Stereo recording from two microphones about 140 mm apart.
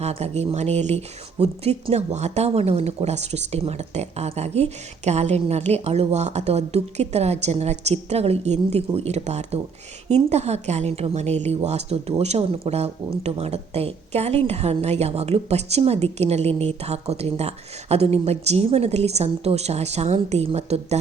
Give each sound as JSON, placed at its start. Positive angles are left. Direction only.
{"t": 0.0, "sound": "speech", "side_deg": -50}